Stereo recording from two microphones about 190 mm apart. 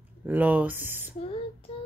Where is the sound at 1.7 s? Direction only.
30° left (ahead or behind).